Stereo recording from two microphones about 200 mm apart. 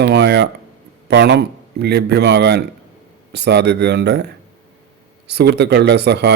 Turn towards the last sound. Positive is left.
turn(degrees=-55)  # may be behind; listen again after turning